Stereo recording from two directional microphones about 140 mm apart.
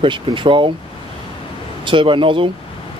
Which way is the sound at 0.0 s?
35° right (ahead or behind).